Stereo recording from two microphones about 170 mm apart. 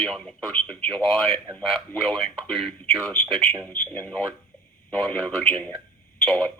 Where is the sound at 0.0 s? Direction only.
5° left (ahead or behind).